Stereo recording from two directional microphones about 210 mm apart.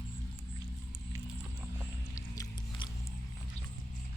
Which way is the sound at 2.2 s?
20° left (ahead or behind).